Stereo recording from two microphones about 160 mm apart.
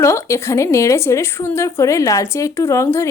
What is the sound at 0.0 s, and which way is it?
A woman's voice, 15° left (ahead or behind).